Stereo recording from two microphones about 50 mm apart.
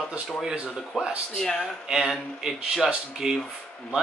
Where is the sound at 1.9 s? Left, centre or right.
Centre.